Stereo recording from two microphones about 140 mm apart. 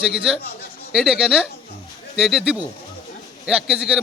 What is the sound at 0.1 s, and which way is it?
A man's voice, 5° right (ahead or behind).